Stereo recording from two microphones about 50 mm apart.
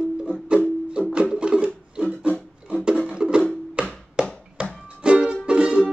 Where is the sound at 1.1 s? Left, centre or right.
Centre.